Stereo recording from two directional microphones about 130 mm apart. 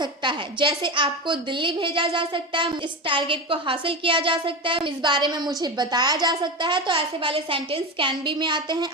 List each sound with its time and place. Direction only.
0.0 s a woman's voice: 35° right (ahead or behind)